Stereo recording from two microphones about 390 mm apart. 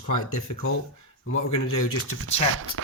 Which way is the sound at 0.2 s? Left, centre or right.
Left.